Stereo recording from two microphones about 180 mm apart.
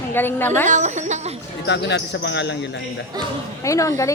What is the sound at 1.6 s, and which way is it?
Speech, 70° left (ahead or behind).